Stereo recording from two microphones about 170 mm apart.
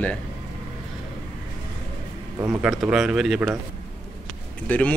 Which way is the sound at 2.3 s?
15° right (ahead or behind).